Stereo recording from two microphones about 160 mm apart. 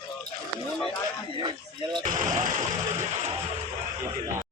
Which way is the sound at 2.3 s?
45° right (ahead or behind).